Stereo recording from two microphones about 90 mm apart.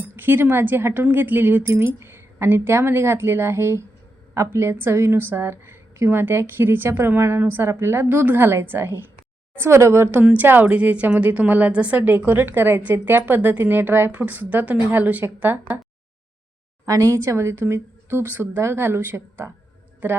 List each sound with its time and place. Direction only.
0.2 s a woman's voice: 20° right (ahead or behind)
16.8 s a woman's voice: 40° right (ahead or behind)